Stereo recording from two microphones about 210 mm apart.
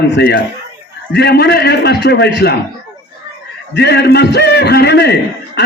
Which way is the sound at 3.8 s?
50° left (ahead or behind).